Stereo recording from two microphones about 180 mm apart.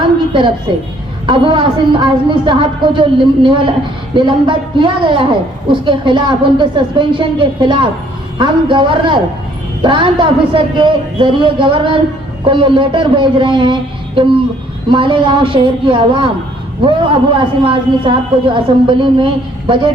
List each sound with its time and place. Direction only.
1.3 s a man's voice: 30° right (ahead or behind)